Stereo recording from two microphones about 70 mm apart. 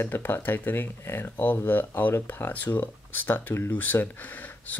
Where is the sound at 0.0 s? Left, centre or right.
Left.